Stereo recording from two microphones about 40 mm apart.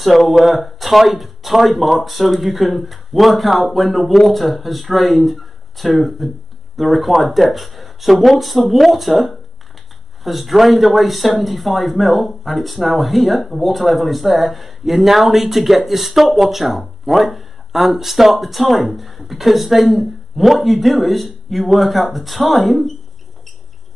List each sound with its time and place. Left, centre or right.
0.0 s speech: centre